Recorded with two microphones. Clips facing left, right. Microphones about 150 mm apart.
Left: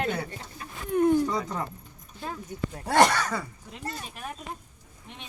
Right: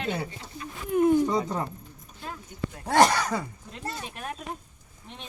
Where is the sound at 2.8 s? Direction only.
5° right (ahead or behind).